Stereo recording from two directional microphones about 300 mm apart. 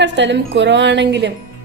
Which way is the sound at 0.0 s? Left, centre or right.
Right.